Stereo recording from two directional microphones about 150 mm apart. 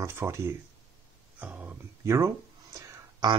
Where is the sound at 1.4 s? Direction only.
10° right (ahead or behind).